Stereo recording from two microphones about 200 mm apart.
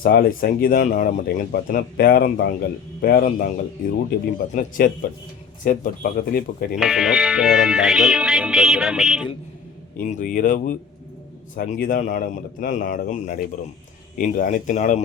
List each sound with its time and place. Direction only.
0.0 s speech: 45° left (ahead or behind)
6.7 s music: centre (ahead or behind)
10.1 s speech: 40° left (ahead or behind)